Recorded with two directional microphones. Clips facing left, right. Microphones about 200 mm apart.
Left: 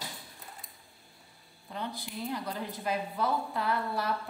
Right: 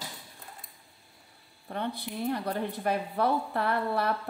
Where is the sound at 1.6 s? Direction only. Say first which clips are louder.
Right 5 dB; 60° right (ahead or behind).